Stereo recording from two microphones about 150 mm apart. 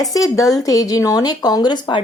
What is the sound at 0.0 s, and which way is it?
Speech, 25° left (ahead or behind).